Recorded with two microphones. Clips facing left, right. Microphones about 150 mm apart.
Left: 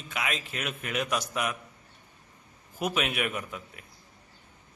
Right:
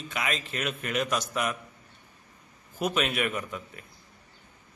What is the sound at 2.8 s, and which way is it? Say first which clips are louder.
A man's voice: right 2 dB; 10° left (ahead or behind).